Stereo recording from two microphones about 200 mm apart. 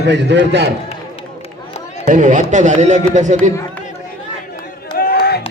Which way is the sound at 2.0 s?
40° right (ahead or behind).